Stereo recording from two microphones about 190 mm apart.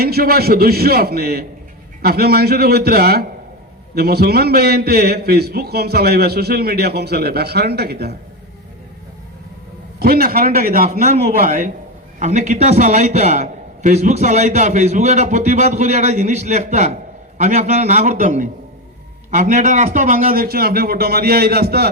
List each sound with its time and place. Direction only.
0.0 s a man's voice: 55° right (ahead or behind)
10.0 s a man's voice: 55° right (ahead or behind)